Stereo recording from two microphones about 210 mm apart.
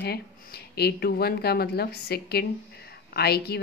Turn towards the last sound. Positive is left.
turn(degrees=50)  # may be behind; listen again after turning